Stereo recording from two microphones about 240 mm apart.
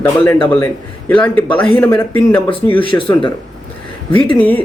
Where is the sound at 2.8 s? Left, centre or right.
Left.